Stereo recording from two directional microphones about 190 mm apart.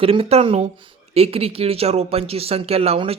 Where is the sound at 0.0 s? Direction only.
30° right (ahead or behind).